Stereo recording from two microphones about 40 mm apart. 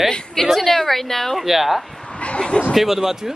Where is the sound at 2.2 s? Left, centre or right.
Left.